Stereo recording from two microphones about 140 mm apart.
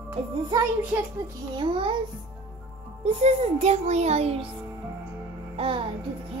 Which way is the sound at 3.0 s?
50° right (ahead or behind).